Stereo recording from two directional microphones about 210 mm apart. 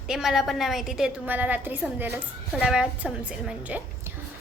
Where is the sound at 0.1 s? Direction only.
Centre (ahead or behind).